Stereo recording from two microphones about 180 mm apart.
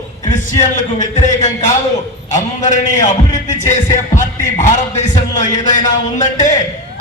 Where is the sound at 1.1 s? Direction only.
40° left (ahead or behind).